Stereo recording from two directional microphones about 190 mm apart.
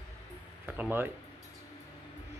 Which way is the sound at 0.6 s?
10° right (ahead or behind).